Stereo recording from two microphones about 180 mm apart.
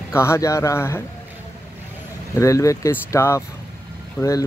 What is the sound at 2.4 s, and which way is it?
Speech, 15° left (ahead or behind).